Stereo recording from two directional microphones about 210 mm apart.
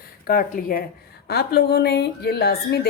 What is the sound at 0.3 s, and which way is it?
Speech, 40° left (ahead or behind).